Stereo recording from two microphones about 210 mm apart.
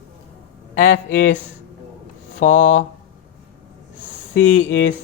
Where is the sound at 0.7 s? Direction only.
35° left (ahead or behind).